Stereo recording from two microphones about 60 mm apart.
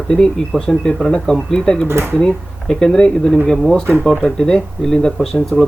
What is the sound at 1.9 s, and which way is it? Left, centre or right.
Speech, right.